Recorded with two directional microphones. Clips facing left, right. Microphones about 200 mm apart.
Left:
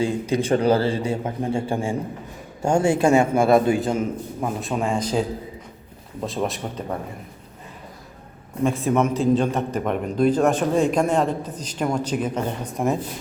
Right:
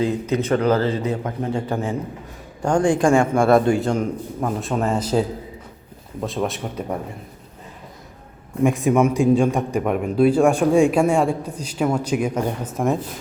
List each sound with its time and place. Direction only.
0.1 s a man's voice: 10° left (ahead or behind)
0.5 s speech: 30° left (ahead or behind)
2.6 s a man's voice: 10° left (ahead or behind)
8.6 s a man's voice: 15° right (ahead or behind)